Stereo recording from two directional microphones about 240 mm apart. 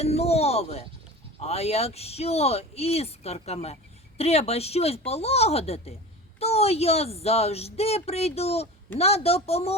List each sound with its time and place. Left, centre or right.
0.0 s speech: left